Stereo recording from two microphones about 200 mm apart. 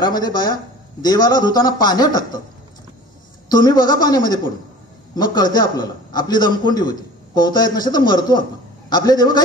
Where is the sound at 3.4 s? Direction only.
20° left (ahead or behind).